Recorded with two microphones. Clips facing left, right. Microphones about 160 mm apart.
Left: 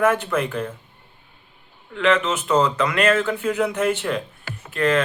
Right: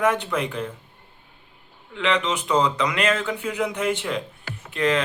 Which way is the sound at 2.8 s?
50° left (ahead or behind).